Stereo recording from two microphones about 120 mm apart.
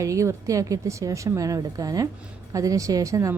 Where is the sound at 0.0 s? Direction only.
25° right (ahead or behind).